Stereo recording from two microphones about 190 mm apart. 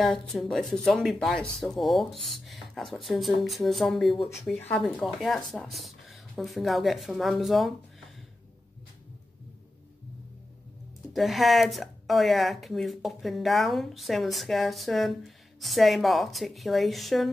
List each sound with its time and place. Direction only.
0.0 s speech: centre (ahead or behind)
11.1 s speech: centre (ahead or behind)